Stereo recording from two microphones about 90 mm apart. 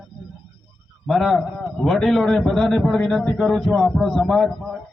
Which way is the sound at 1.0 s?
5° left (ahead or behind).